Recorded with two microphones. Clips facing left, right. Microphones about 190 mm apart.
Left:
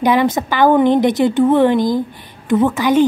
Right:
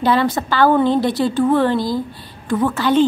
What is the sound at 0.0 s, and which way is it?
A woman's voice, 15° left (ahead or behind).